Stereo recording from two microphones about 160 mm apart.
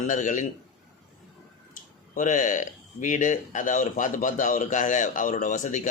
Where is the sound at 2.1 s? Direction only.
55° left (ahead or behind).